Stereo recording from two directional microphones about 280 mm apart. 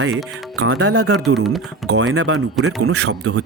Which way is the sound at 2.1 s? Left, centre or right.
Right.